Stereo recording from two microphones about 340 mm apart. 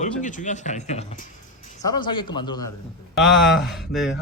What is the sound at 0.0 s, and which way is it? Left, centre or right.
A man's voice, left.